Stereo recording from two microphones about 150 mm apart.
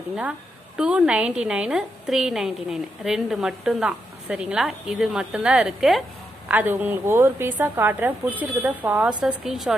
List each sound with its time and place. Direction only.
0.8 s a woman's voice: 5° right (ahead or behind)